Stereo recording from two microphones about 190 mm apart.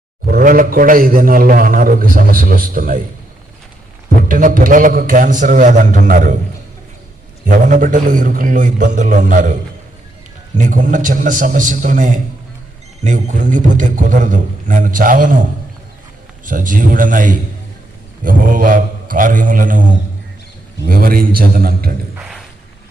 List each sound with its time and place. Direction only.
0.3 s a man's voice: 50° right (ahead or behind)
4.2 s a man's voice: 45° right (ahead or behind)
7.4 s a man's voice: 45° right (ahead or behind)
10.6 s a man's voice: 45° right (ahead or behind)
16.5 s a man's voice: 45° right (ahead or behind)
22.1 s a sound: 5° right (ahead or behind)